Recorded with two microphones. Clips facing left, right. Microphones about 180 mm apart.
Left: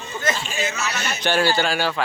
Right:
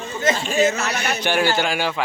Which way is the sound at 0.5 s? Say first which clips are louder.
Right 7 dB; 45° right (ahead or behind).